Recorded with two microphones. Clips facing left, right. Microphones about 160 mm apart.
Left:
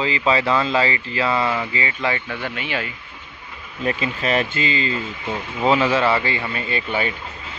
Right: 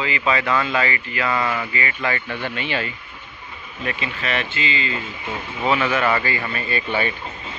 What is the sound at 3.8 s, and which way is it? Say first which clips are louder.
Speech: left 4 dB; 35° left (ahead or behind).